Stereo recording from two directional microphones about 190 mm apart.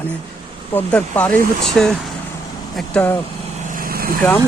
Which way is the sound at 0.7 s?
10° left (ahead or behind).